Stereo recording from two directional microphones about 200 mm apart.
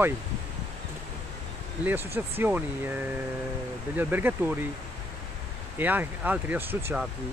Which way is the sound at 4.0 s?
10° right (ahead or behind).